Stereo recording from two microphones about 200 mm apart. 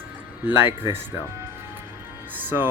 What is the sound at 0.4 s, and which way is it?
Speech, 10° right (ahead or behind).